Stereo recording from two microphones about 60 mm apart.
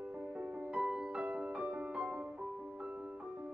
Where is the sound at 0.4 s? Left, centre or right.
Centre.